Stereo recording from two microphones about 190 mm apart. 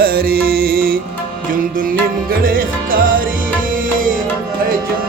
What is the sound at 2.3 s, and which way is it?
Music, 50° right (ahead or behind).